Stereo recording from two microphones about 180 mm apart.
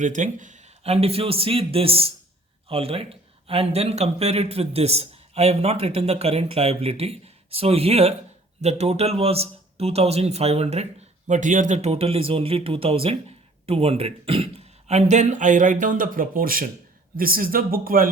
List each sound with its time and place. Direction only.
0.0 s a man's voice: 45° right (ahead or behind)